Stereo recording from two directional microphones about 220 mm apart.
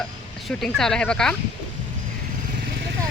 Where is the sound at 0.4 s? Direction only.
Centre (ahead or behind).